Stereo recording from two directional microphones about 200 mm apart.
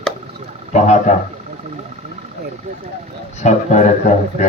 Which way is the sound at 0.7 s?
35° left (ahead or behind).